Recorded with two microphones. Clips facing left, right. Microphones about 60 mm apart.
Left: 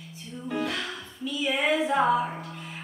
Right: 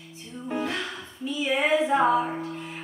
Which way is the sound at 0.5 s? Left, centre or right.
Centre.